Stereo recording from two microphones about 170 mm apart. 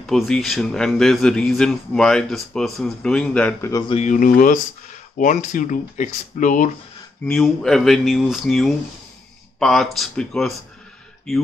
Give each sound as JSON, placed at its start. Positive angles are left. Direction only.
{"t": 0.0, "sound": "a man's voice", "side_deg": 5}
{"t": 3.9, "sound": "speech", "side_deg": 45}
{"t": 7.2, "sound": "a man's voice", "side_deg": 0}